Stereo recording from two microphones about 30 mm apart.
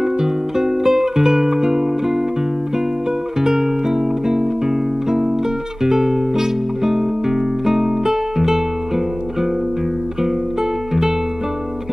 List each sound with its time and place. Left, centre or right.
0.0 s music: centre
3.3 s music: centre